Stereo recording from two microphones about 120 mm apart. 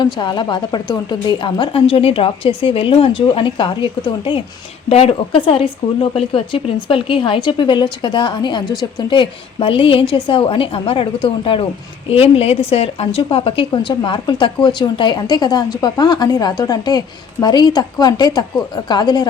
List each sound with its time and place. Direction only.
0.0 s a woman's voice: 40° left (ahead or behind)
4.9 s a woman's voice: 55° left (ahead or behind); by 19.3 s 35° left (ahead or behind)